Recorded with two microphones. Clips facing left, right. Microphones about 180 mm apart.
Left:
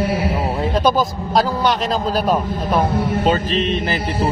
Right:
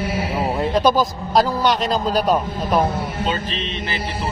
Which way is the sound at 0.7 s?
Centre (ahead or behind).